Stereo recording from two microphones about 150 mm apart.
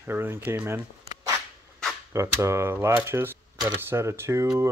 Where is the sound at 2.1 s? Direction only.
20° right (ahead or behind).